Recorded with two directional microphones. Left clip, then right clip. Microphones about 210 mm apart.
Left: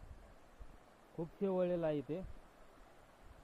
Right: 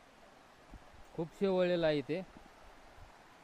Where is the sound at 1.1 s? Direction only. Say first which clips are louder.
Right 5 dB; 35° right (ahead or behind).